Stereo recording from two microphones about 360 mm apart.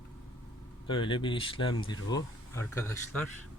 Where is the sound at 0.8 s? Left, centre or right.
Centre.